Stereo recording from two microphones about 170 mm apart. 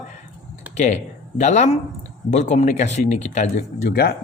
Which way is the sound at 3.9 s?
65° left (ahead or behind).